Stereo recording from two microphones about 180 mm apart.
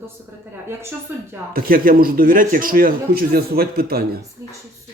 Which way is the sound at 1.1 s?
10° right (ahead or behind).